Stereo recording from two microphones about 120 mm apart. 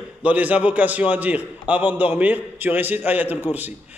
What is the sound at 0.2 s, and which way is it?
A man's voice, 10° right (ahead or behind).